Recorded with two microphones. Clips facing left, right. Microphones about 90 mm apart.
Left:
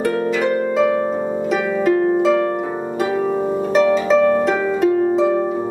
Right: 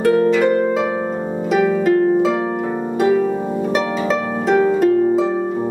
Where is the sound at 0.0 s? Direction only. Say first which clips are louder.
Right 4 dB; centre (ahead or behind).